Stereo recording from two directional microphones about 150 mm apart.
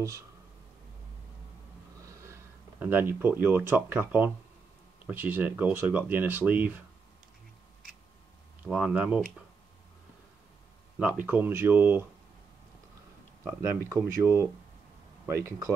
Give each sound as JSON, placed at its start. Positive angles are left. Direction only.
{"t": 2.0, "sound": "speech", "side_deg": -20}
{"t": 8.6, "sound": "speech", "side_deg": -5}
{"t": 11.0, "sound": "speech", "side_deg": -10}
{"t": 13.4, "sound": "speech", "side_deg": -15}